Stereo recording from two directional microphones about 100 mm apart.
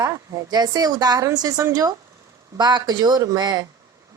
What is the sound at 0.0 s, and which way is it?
Speech, 40° right (ahead or behind).